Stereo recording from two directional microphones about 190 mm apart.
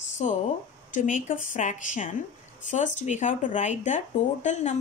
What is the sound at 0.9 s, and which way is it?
Speech, 45° left (ahead or behind).